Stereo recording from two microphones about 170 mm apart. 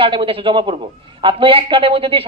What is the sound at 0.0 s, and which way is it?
Speech, 30° right (ahead or behind).